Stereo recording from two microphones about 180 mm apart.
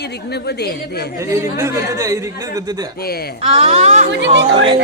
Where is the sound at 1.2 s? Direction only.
15° right (ahead or behind).